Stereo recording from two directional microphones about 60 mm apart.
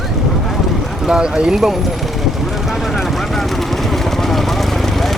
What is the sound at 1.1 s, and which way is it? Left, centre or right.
Speech, centre.